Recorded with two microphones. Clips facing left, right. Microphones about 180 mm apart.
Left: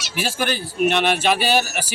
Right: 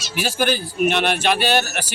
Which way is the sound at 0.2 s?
Centre (ahead or behind).